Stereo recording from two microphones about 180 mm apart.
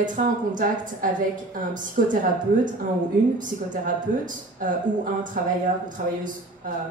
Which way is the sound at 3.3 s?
45° right (ahead or behind).